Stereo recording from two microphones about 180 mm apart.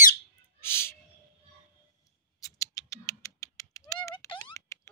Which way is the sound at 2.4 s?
20° left (ahead or behind).